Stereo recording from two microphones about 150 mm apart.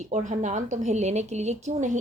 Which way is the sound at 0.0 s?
55° right (ahead or behind).